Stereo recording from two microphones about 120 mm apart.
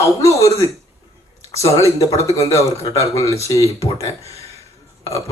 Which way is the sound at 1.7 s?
25° left (ahead or behind).